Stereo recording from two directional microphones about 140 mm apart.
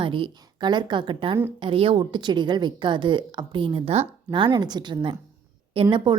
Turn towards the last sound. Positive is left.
turn(degrees=-35)  # may be behind; listen again after turning